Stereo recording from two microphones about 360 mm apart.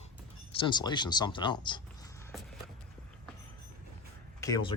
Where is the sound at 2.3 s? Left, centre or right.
Centre.